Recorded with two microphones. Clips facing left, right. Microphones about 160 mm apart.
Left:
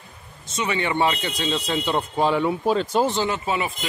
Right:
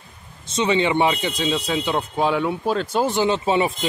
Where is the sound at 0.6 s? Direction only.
20° right (ahead or behind); by 3.2 s centre (ahead or behind).